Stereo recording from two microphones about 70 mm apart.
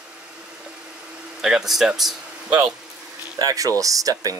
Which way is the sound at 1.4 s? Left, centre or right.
Centre.